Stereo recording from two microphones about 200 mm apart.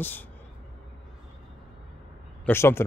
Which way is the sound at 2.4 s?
10° left (ahead or behind).